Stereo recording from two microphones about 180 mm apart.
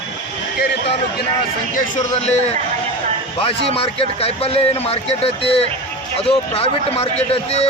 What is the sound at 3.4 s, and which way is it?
Speech, 30° left (ahead or behind).